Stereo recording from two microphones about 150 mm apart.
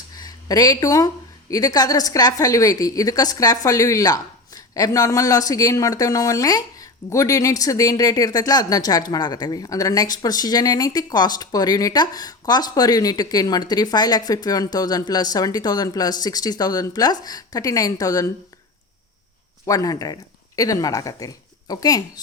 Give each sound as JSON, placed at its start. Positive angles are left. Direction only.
{"t": 0.1, "sound": "a woman's voice", "side_deg": 25}
{"t": 19.6, "sound": "a woman's voice", "side_deg": 25}